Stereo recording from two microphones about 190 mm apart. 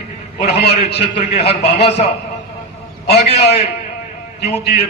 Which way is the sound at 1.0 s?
35° left (ahead or behind).